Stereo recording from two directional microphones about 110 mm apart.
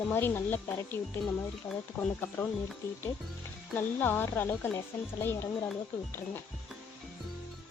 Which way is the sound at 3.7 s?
15° left (ahead or behind).